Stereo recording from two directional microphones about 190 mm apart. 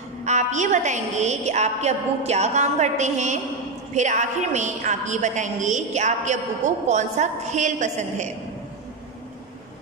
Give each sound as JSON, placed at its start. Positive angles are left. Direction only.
{"t": 0.2, "sound": "a woman's voice", "side_deg": -40}